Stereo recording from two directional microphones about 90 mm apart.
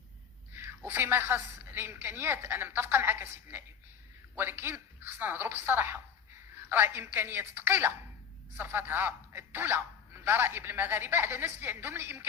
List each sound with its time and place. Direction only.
0.5 s speech: 25° right (ahead or behind)